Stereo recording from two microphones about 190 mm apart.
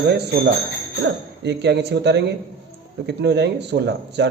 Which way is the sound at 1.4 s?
60° right (ahead or behind).